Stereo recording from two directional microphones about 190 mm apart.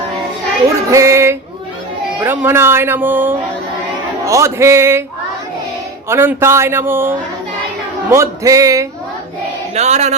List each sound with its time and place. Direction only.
0.9 s a sound: 15° right (ahead or behind)
2.2 s a man's voice: 10° right (ahead or behind)
6.1 s a man's voice: 15° right (ahead or behind)
9.7 s music: 35° right (ahead or behind)